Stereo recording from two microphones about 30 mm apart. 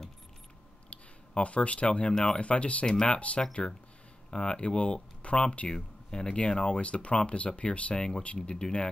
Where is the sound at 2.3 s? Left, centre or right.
Left.